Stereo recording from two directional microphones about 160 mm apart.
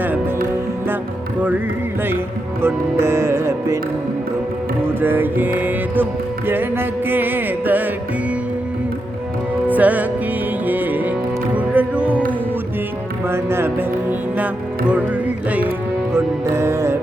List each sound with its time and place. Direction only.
2.6 s music: 15° right (ahead or behind)
4.9 s music: 15° right (ahead or behind)
9.6 s music: 10° right (ahead or behind)
13.2 s speech: 15° right (ahead or behind)
16.1 s music: 15° right (ahead or behind)